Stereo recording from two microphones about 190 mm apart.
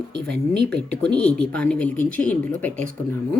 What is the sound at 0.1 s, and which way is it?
Speech, 60° right (ahead or behind).